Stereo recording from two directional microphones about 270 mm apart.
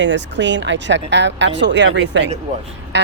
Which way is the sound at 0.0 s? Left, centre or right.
Right.